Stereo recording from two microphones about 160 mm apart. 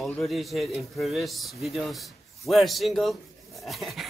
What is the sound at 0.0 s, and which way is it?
Speech, centre (ahead or behind).